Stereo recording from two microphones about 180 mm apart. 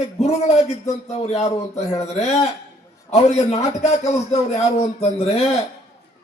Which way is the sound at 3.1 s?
40° left (ahead or behind).